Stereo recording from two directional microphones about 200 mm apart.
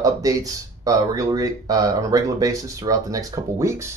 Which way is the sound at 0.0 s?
15° right (ahead or behind).